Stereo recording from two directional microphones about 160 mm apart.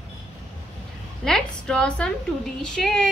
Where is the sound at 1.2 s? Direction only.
5° left (ahead or behind).